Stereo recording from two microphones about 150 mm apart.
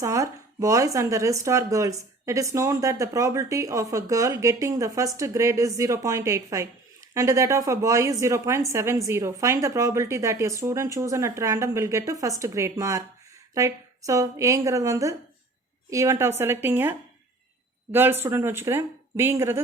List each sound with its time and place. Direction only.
0.0 s speech: 20° right (ahead or behind)
17.9 s speech: 15° right (ahead or behind)